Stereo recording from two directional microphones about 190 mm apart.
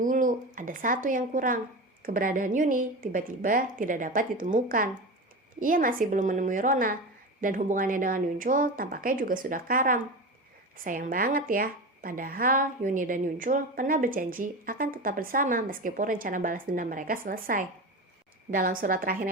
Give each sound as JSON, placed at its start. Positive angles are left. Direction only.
{"t": 0.0, "sound": "a woman's voice", "side_deg": -45}